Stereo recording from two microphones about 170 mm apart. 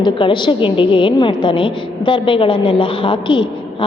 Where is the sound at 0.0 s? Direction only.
30° left (ahead or behind).